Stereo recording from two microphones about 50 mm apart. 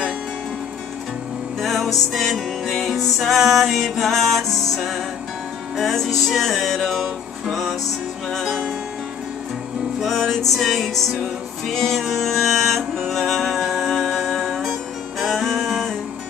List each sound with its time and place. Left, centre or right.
1.6 s music: centre
5.8 s music: centre
9.9 s music: centre